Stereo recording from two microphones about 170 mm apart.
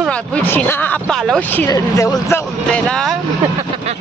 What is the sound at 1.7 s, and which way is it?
Speech, 20° left (ahead or behind).